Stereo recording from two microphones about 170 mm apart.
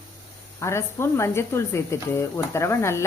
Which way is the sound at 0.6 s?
15° left (ahead or behind).